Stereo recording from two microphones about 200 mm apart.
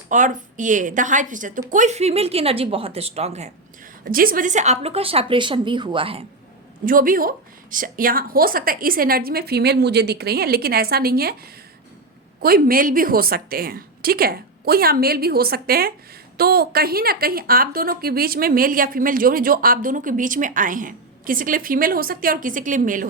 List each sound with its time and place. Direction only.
0.1 s speech: 40° right (ahead or behind)
4.1 s a woman's voice: 45° right (ahead or behind); by 6.2 s 25° right (ahead or behind)
6.8 s a woman's voice: 45° right (ahead or behind)
12.4 s a woman's voice: 45° right (ahead or behind)